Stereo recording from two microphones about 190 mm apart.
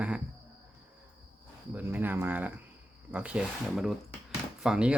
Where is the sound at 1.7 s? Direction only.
10° right (ahead or behind).